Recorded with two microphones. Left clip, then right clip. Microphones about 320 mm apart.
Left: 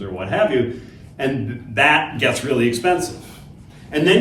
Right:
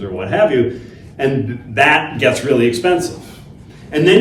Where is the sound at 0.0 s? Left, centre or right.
Centre.